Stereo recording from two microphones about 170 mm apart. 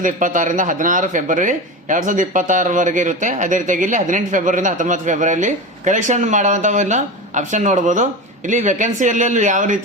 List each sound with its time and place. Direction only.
0.0 s speech: 50° right (ahead or behind)